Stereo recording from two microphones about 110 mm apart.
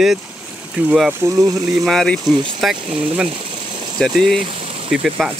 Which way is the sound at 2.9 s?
60° right (ahead or behind).